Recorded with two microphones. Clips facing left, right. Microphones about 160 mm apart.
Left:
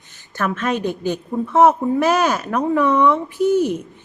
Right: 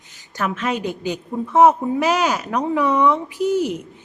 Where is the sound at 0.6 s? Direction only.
10° right (ahead or behind).